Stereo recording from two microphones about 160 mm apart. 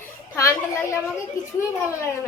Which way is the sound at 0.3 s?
20° left (ahead or behind).